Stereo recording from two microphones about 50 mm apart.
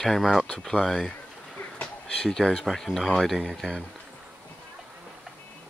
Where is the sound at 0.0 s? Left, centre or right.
Centre.